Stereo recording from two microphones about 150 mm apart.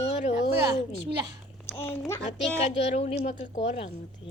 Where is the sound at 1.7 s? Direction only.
15° left (ahead or behind).